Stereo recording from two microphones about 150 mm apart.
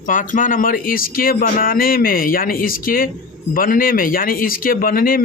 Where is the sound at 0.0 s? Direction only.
60° left (ahead or behind).